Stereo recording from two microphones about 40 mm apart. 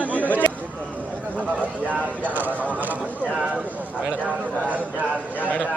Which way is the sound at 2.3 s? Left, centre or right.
Right.